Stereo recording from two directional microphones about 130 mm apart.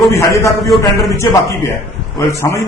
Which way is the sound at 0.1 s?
25° left (ahead or behind).